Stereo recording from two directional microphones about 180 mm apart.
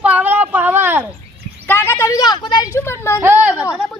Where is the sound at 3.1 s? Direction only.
10° right (ahead or behind).